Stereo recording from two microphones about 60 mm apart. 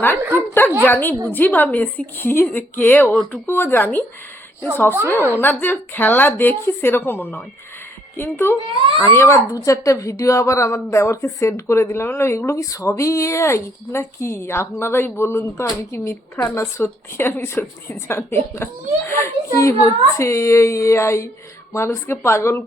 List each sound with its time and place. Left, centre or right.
0.3 s a woman's voice: left
5.0 s a woman's voice: left
9.6 s a woman's voice: left